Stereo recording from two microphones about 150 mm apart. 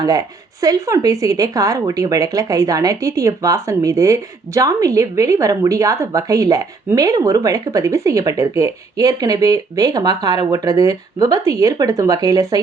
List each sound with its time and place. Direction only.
0.0 s speech: 25° right (ahead or behind)